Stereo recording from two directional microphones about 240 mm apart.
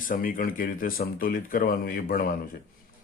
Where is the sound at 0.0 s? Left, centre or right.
Left.